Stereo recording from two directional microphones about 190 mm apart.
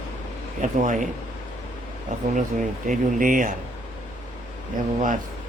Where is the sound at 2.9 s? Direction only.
45° right (ahead or behind).